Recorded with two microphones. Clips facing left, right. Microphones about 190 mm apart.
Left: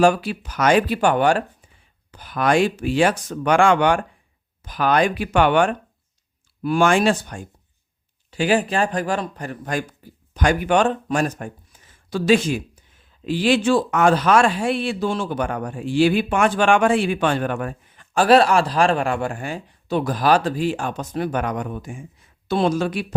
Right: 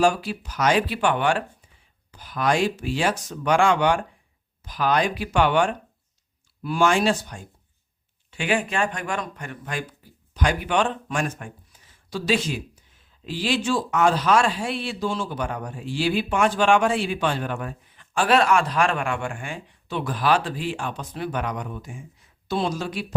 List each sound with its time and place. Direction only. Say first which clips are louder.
0.0 s speech: left 4 dB; 60° left (ahead or behind); by 1.5 s 40° left (ahead or behind)
2.1 s speech: left 4 dB; 60° left (ahead or behind)
8.3 s speech: left 5 dB; 35° left (ahead or behind); by 23.0 s 55° left (ahead or behind)